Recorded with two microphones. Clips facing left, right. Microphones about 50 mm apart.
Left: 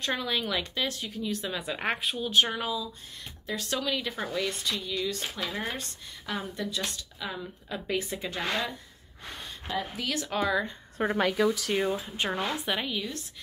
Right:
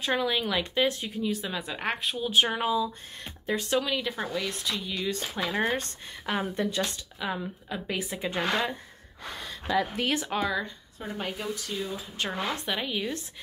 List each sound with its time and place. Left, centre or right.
0.0 s a woman's voice: centre
0.7 s speech: right
1.2 s speech: centre
2.3 s speech: centre
3.7 s a woman's voice: centre
4.9 s speech: right
7.2 s a woman's voice: centre
7.7 s speech: centre
8.4 s speech: right
10.0 s speech: right
10.3 s speech: centre
11.0 s speech: left
12.4 s speech: centre